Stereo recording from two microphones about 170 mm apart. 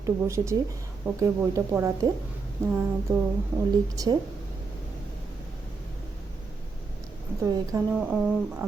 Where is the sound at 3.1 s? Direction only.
15° right (ahead or behind).